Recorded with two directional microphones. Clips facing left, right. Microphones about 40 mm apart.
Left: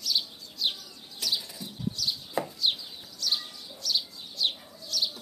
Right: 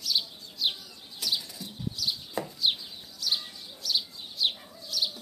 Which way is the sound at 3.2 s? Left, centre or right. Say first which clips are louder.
Even; centre.